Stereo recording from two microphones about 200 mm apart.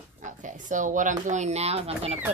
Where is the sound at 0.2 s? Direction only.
40° right (ahead or behind).